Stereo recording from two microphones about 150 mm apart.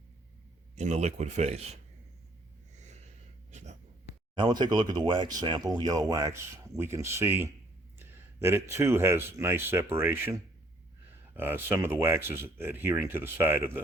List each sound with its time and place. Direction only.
0.8 s speech: 50° right (ahead or behind)
3.5 s writing: 50° right (ahead or behind)
4.4 s speech: 30° right (ahead or behind); by 13.8 s 15° right (ahead or behind)